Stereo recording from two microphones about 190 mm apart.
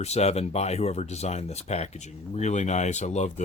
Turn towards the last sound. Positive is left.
turn(degrees=35)  # may be behind; listen again after turning